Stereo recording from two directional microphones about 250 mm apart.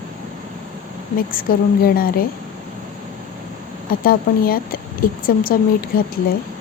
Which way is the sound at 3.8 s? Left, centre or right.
Left.